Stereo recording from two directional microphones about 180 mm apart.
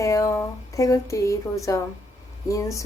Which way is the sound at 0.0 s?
20° left (ahead or behind).